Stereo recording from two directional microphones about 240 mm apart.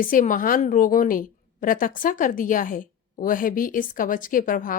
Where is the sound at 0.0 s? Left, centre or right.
Left.